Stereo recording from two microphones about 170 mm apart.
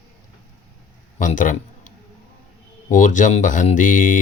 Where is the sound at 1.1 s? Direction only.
50° left (ahead or behind).